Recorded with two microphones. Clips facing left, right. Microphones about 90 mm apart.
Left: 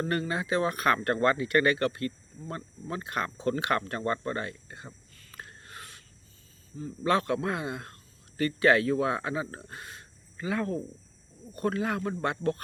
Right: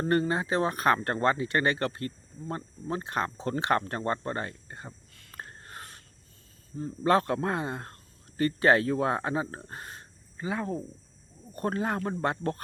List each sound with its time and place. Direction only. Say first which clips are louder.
0.0 s speech: right 4 dB; 30° right (ahead or behind)
5.3 s a sound: right 2 dB; 40° right (ahead or behind)
7.0 s speech: right 2 dB; 35° right (ahead or behind)
10.3 s speech: left 1 dB; 25° right (ahead or behind)
11.5 s speech: even; 40° right (ahead or behind)